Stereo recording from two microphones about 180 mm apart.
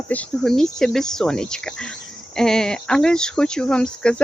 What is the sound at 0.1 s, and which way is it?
Speech, 5° left (ahead or behind).